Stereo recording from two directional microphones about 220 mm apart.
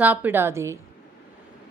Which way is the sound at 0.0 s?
10° right (ahead or behind).